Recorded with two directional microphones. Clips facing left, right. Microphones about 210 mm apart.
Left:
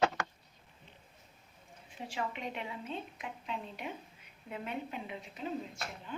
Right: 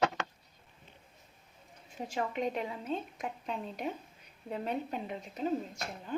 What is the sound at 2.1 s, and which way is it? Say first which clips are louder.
A woman's voice: right 5 dB; 40° right (ahead or behind).